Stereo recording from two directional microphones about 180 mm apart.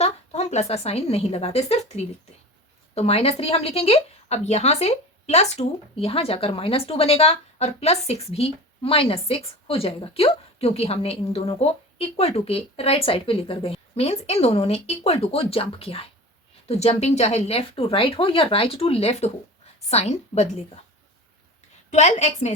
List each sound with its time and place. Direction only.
0.0 s speech: 35° left (ahead or behind)
21.8 s speech: 40° left (ahead or behind)